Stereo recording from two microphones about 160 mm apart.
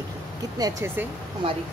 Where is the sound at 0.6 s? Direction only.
20° right (ahead or behind).